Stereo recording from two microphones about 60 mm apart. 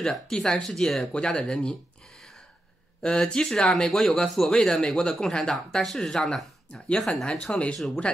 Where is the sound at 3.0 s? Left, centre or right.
Centre.